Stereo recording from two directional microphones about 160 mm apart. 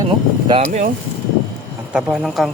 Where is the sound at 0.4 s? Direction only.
40° right (ahead or behind).